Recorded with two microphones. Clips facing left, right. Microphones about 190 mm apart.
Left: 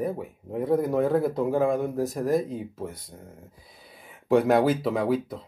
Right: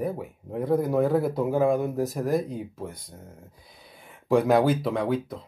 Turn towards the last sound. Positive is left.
turn(degrees=5)  # may be behind; listen again after turning